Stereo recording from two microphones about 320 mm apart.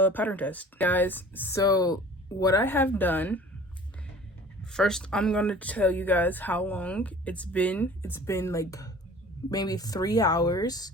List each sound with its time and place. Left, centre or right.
0.0 s speech: centre
4.6 s speech: centre